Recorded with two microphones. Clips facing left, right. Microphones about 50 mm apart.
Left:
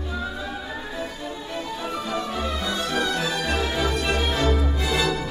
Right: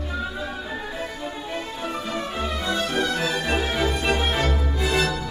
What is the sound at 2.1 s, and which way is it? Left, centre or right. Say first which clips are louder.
Music: left 2 dB; right.